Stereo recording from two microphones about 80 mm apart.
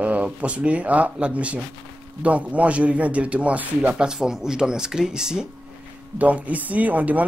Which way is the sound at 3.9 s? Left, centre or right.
Centre.